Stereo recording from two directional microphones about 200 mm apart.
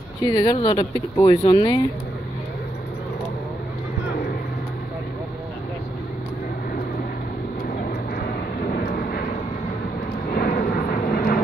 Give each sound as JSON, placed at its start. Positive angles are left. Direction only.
{"t": 0.3, "sound": "speech", "side_deg": 20}
{"t": 8.7, "sound": "vehicle", "side_deg": 45}
{"t": 10.3, "sound": "vehicle", "side_deg": 45}